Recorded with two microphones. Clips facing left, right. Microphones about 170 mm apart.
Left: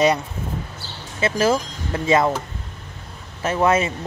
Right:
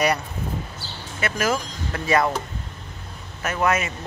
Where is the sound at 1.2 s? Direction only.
25° left (ahead or behind).